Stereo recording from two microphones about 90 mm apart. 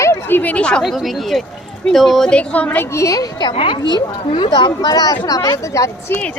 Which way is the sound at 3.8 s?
50° left (ahead or behind).